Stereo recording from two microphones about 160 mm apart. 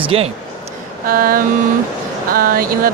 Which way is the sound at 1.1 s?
65° right (ahead or behind).